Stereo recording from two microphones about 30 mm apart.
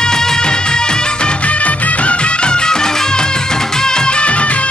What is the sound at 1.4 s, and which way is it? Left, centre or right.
Music, left.